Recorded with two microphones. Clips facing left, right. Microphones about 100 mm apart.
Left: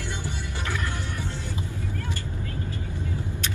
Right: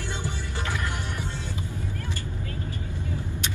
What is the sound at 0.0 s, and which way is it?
Music, 15° right (ahead or behind).